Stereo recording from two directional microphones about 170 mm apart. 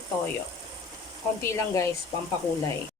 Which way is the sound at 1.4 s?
15° left (ahead or behind).